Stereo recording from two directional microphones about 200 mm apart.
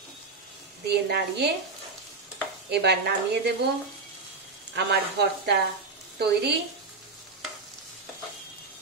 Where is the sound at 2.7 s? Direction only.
55° right (ahead or behind).